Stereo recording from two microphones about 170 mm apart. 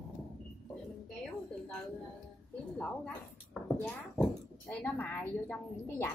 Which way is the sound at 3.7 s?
5° left (ahead or behind).